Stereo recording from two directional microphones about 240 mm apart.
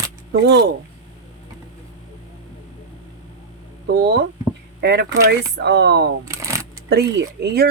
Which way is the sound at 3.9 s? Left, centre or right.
Right.